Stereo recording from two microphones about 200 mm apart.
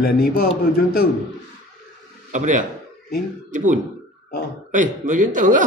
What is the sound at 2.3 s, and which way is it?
Speech, 40° right (ahead or behind).